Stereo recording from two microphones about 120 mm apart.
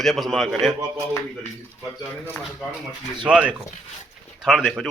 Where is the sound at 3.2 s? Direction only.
10° right (ahead or behind).